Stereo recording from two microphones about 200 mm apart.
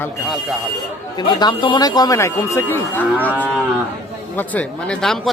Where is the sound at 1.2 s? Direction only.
20° left (ahead or behind).